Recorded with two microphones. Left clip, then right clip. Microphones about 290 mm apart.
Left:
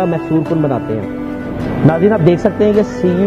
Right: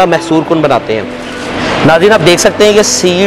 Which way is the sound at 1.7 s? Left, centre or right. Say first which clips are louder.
Right 7 dB; centre.